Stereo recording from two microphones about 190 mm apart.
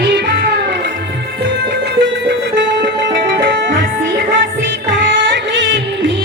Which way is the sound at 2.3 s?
70° right (ahead or behind).